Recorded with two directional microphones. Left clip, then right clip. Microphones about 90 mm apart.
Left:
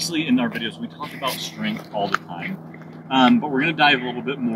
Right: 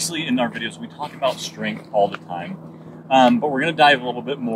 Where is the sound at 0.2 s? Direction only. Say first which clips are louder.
Right 1 dB; 20° right (ahead or behind).